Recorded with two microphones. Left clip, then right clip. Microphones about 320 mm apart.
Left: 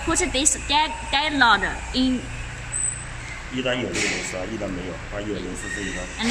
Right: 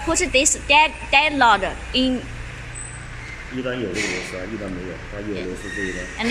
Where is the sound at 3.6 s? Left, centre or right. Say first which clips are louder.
Left 2 dB; left.